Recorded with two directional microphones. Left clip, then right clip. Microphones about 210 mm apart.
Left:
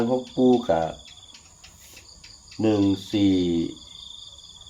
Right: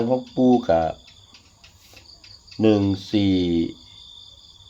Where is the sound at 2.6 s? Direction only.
45° right (ahead or behind).